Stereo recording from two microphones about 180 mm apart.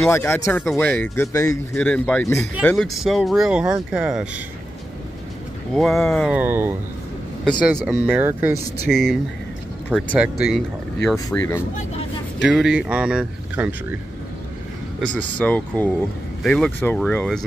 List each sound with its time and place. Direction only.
0.1 s speech: 15° left (ahead or behind); by 4.3 s 5° right (ahead or behind)
5.7 s speech: centre (ahead or behind)
6.3 s speech: 10° right (ahead or behind)
7.7 s speech: 10° right (ahead or behind)
8.9 s speech: 5° left (ahead or behind)
11.2 s speech: 15° left (ahead or behind)
12.4 s speech: 5° right (ahead or behind)
15.1 s speech: 10° left (ahead or behind)